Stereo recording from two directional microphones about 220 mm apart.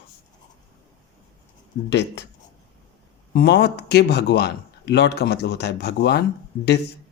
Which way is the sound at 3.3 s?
45° left (ahead or behind).